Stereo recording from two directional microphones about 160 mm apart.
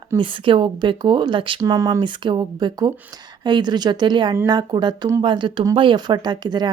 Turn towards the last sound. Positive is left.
turn(degrees=-25)  # may be behind; listen again after turning